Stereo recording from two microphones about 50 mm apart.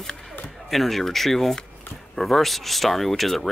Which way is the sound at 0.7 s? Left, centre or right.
Centre.